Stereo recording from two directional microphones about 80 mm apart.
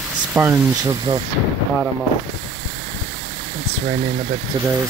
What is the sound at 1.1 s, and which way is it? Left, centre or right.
Speech, right.